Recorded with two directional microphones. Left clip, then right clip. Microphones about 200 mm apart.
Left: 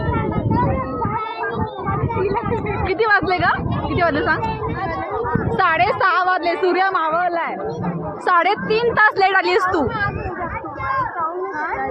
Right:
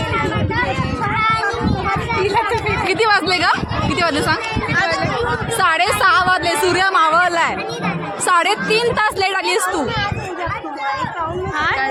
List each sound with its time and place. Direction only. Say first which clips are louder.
2.8 s a sound: even; 20° right (ahead or behind)
5.5 s a woman's voice: right 1 dB; 10° right (ahead or behind)
7.1 s speech: right 5 dB; 20° right (ahead or behind)
8.3 s a woman's voice: right 1 dB; 10° right (ahead or behind)